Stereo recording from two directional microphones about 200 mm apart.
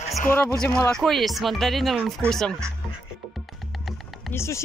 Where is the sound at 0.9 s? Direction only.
Centre (ahead or behind).